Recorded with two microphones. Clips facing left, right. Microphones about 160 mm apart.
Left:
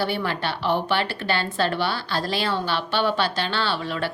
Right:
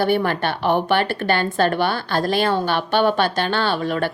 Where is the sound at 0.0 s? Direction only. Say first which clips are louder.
Right 6 dB; 50° right (ahead or behind).